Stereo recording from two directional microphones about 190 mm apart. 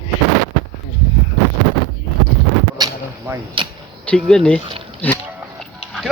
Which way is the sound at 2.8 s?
20° right (ahead or behind).